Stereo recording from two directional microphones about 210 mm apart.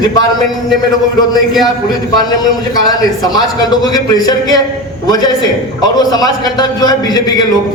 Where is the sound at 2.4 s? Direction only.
20° left (ahead or behind).